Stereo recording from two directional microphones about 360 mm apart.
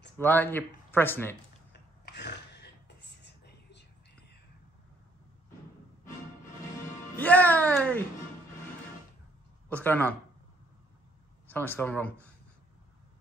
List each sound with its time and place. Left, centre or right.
0.2 s speech: centre
1.7 s a sound: left
7.2 s speech: centre
9.7 s speech: centre
11.4 s speech: centre